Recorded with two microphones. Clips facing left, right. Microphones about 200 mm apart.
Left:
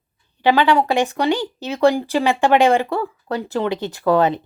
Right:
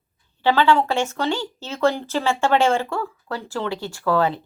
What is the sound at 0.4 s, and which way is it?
A woman's voice, 15° left (ahead or behind).